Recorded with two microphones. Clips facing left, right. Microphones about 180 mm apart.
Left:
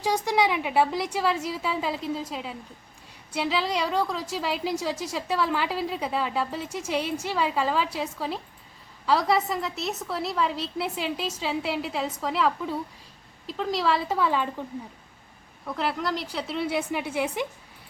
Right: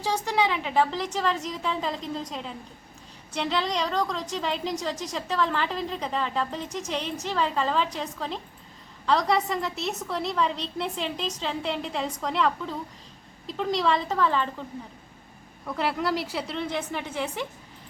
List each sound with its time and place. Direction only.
0.0 s a woman's voice: 15° left (ahead or behind)
15.6 s a woman's voice: centre (ahead or behind)